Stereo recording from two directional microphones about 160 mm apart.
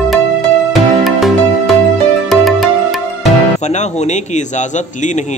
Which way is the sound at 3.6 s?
45° left (ahead or behind).